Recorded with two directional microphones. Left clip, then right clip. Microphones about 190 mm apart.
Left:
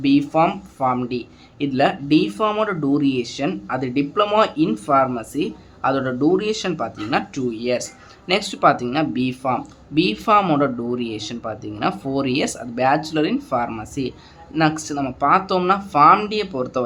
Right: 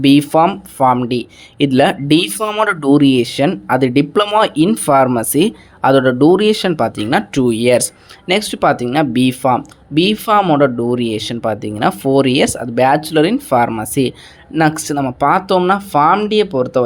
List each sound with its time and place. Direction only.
0.0 s speech: 45° right (ahead or behind)
8.3 s speech: 35° right (ahead or behind)
10.4 s speech: 20° right (ahead or behind)
10.8 s speech: 35° right (ahead or behind)